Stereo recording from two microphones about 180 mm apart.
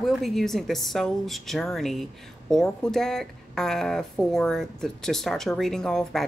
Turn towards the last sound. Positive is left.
turn(degrees=5)  # may be behind; listen again after turning